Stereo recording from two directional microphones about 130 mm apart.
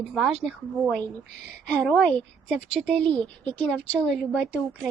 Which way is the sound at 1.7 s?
10° left (ahead or behind).